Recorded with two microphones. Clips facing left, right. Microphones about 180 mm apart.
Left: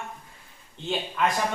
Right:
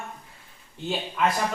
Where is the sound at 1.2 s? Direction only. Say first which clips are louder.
Right 1 dB; 5° right (ahead or behind).